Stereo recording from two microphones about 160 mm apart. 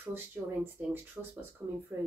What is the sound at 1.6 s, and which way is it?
Speech, 15° right (ahead or behind).